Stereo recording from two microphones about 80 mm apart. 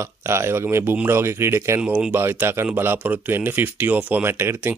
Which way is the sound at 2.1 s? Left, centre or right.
Right.